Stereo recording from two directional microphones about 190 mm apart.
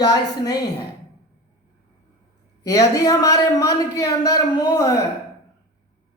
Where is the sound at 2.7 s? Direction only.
20° left (ahead or behind).